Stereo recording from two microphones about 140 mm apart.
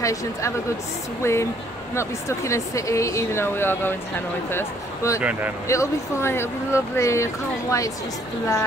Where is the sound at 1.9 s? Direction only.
20° left (ahead or behind).